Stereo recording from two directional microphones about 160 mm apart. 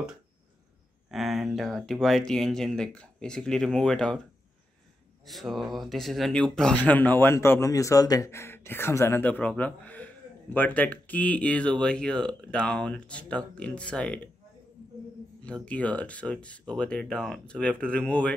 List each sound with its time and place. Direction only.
1.1 s speech: centre (ahead or behind)
5.2 s speech: centre (ahead or behind)
15.4 s speech: 5° left (ahead or behind)